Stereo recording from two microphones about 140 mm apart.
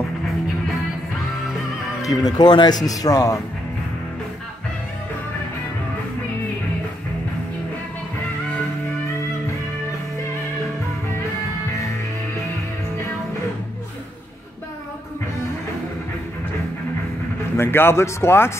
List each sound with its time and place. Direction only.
2.0 s speech: 25° left (ahead or behind)
17.6 s a man's voice: 15° left (ahead or behind)